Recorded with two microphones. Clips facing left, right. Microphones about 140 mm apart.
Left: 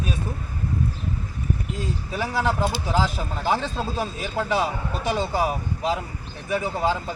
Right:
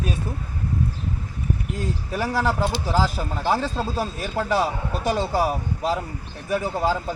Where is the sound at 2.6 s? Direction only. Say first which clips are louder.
Right 1 dB; 5° left (ahead or behind).